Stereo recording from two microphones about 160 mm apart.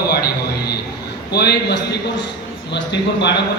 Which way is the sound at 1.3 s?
90° left.